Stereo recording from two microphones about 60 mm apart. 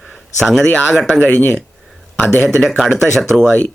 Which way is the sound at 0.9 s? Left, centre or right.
Centre.